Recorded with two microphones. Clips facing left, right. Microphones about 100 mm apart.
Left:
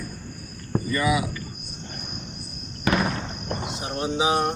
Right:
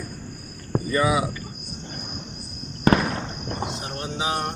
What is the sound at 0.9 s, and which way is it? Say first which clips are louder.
Speech: right 2 dB; 30° right (ahead or behind).